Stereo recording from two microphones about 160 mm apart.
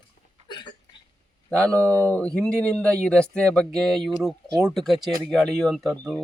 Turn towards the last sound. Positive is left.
turn(degrees=0)  # may be behind; listen again after turning